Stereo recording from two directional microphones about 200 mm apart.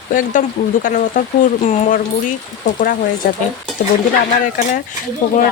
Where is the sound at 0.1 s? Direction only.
40° left (ahead or behind).